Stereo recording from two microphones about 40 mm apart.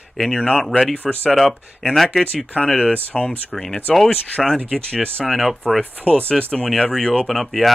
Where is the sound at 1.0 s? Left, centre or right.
Left.